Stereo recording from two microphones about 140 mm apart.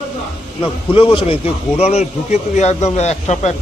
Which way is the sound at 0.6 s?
40° left (ahead or behind).